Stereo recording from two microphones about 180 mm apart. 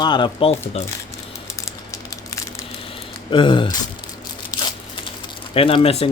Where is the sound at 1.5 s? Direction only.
15° left (ahead or behind).